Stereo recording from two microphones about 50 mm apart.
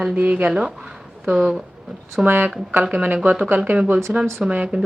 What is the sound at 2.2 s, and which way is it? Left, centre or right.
Speech, right.